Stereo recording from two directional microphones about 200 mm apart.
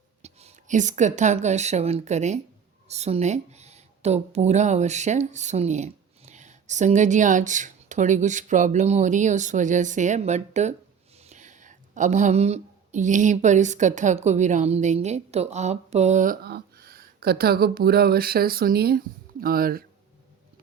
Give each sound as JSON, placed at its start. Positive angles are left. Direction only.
{"t": 0.2, "sound": "speech", "side_deg": -30}